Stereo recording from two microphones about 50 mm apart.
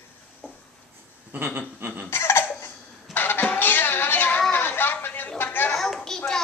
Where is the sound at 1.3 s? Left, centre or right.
Right.